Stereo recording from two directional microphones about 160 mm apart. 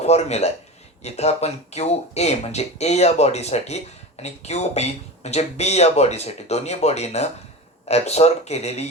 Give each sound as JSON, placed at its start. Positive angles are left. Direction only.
{"t": 0.0, "sound": "speech", "side_deg": 45}